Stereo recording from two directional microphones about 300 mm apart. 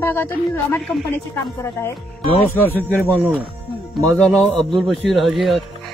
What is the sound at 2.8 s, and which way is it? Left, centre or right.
Speech, centre.